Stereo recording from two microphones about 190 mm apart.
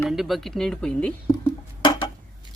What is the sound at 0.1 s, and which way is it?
Speech, centre (ahead or behind).